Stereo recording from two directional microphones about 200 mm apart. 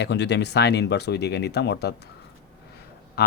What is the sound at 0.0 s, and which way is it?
Speech, 55° left (ahead or behind).